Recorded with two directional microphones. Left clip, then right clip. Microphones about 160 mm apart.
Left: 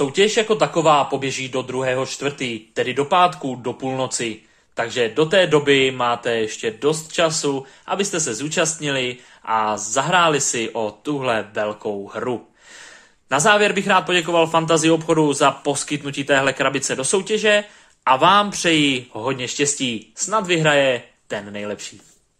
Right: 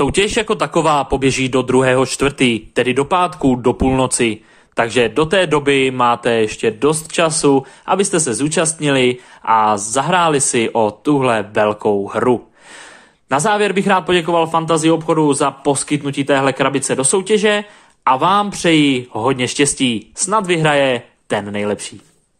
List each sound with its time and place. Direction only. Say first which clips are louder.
0.0 s a man's voice: right 2 dB; 55° right (ahead or behind); by 6.9 s 35° right (ahead or behind)
6.9 s speech: right 3 dB; 50° right (ahead or behind)
13.3 s a man's voice: right 1 dB; 25° right (ahead or behind)
19.2 s speech: right 6 dB; 35° right (ahead or behind)